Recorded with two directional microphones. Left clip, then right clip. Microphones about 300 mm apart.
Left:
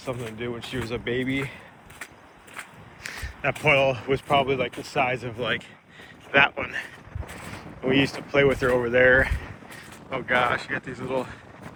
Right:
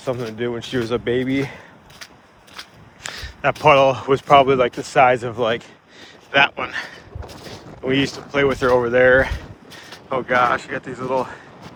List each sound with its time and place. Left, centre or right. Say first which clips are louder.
0.0 s speech: right 8 dB; right
3.0 s speech: right 7 dB; centre
7.9 s speech: right 2 dB; centre